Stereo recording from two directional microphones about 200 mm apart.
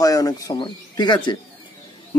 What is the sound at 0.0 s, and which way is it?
Speech, 15° left (ahead or behind).